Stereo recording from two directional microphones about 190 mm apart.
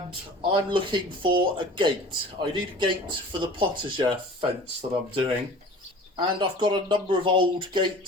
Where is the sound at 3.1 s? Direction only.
25° right (ahead or behind).